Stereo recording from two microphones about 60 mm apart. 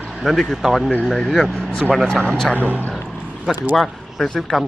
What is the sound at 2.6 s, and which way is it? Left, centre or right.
Speech, right.